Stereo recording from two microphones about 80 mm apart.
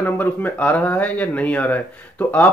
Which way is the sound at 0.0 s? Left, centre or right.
Left.